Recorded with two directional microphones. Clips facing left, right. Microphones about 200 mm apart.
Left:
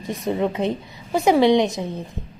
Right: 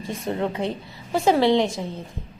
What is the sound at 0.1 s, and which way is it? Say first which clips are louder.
A woman's voice: left 4 dB; 15° left (ahead or behind).